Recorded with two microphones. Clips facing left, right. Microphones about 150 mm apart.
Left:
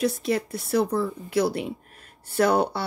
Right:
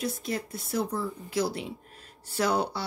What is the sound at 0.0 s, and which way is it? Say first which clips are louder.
Speech: left 7 dB; 75° left (ahead or behind).